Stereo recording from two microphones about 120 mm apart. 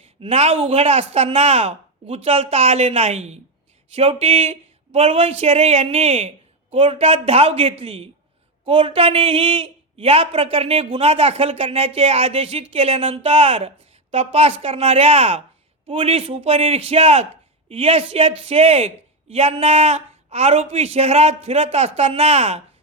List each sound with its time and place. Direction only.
0.0 s speech: 55° right (ahead or behind)
3.9 s a woman's voice: 55° right (ahead or behind)